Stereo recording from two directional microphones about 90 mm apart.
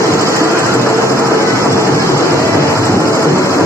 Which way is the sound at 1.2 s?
30° right (ahead or behind).